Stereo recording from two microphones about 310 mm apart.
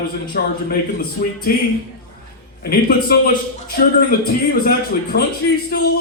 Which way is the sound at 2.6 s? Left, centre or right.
Left.